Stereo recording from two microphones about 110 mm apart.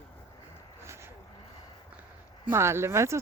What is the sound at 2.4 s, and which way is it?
Speech, 25° right (ahead or behind).